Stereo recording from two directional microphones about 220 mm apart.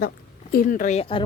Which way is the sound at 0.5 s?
35° left (ahead or behind).